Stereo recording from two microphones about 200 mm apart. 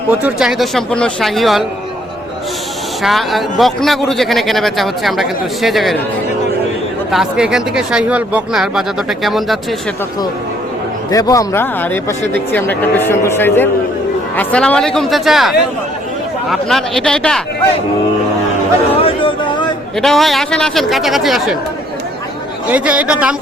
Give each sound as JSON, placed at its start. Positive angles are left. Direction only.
{"t": 0.1, "sound": "a man's voice", "side_deg": -10}
{"t": 3.0, "sound": "a man's voice", "side_deg": 0}
{"t": 7.1, "sound": "a man's voice", "side_deg": -5}
{"t": 11.1, "sound": "a man's voice", "side_deg": 15}
{"t": 18.9, "sound": "speech", "side_deg": 25}
{"t": 20.0, "sound": "a man's voice", "side_deg": 0}
{"t": 22.7, "sound": "speech", "side_deg": -5}